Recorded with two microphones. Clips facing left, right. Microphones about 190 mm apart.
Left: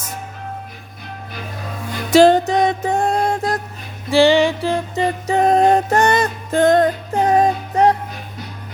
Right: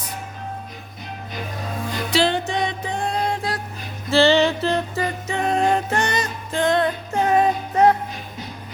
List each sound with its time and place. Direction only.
2.0 s music: 45° left (ahead or behind)
4.1 s music: 15° left (ahead or behind)
4.9 s music: 35° left (ahead or behind)
6.1 s music: 55° left (ahead or behind); by 7.9 s 35° left (ahead or behind)